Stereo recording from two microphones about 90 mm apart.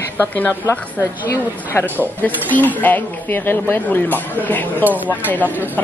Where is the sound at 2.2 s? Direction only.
20° left (ahead or behind).